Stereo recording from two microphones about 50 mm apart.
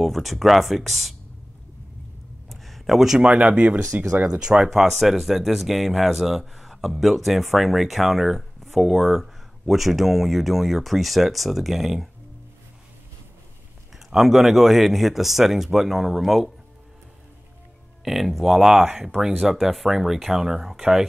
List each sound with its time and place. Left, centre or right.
0.0 s speech: centre
2.5 s a sound: centre
3.2 s speech: right
4.3 s speech: centre
4.6 s speech: centre
13.9 s speech: centre
18.0 s speech: centre